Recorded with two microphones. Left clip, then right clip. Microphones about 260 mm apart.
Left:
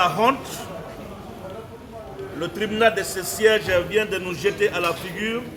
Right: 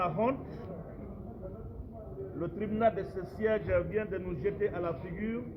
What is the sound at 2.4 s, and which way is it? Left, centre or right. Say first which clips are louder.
A man's voice: left 10 dB; centre.